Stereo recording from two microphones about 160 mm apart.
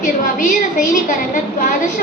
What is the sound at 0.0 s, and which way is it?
A woman's voice, 55° left (ahead or behind).